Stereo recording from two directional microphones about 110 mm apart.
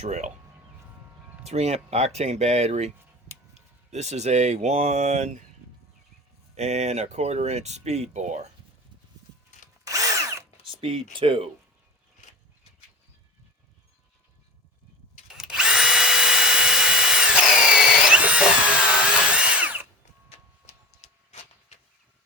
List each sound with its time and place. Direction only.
0.0 s speech: 90° right
1.5 s speech: 75° right (ahead or behind)
3.9 s speech: 90° right
6.6 s speech: 90° right
9.8 s drill: 30° right (ahead or behind)
10.6 s speech: 55° right (ahead or behind)
15.3 s drill: 5° right (ahead or behind)
21.0 s a sound: 85° left